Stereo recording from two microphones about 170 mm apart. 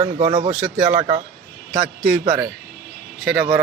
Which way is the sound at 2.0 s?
Centre (ahead or behind).